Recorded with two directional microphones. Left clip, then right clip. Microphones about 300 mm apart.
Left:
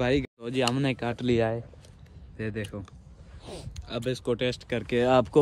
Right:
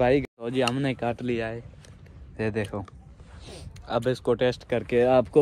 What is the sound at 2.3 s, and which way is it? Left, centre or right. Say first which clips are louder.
Speech: right 6 dB; centre.